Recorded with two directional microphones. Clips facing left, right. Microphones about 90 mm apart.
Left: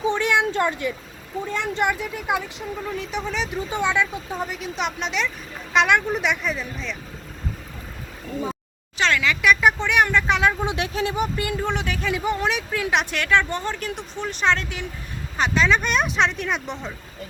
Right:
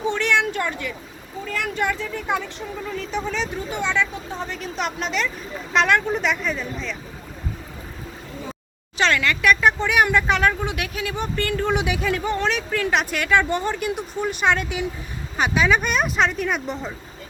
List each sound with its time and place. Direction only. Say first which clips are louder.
0.0 s a sound: even; 15° left (ahead or behind)
0.4 s speech: left 3 dB; 25° left (ahead or behind); by 3.5 s centre (ahead or behind)
3.7 s speech: left 2 dB; 15° left (ahead or behind); by 6.9 s centre (ahead or behind)
9.0 s speech: right 1 dB; centre (ahead or behind)
10.6 s speech: left 3 dB; 25° left (ahead or behind)
11.1 s speech: even; 10° left (ahead or behind)
11.7 s speech: right 4 dB; 10° right (ahead or behind)
12.0 s speech: right 1 dB; 5° left (ahead or behind)